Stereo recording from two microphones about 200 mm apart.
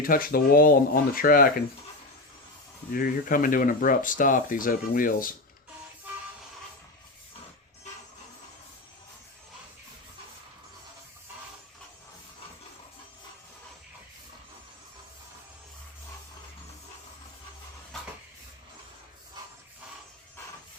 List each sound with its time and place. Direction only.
0.0 s speech: 45° left (ahead or behind)
2.9 s speech: 45° left (ahead or behind)